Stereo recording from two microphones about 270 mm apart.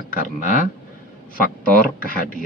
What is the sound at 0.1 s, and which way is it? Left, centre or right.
Speech, left.